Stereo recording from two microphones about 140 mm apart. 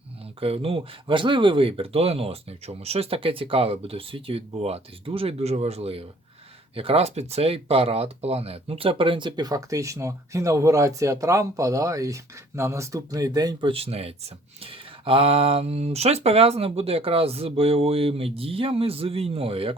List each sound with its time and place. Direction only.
0.3 s speech: 45° right (ahead or behind)